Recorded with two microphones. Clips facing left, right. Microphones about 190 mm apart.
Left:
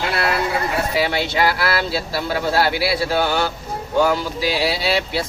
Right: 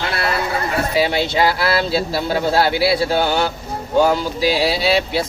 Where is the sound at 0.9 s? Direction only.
20° right (ahead or behind).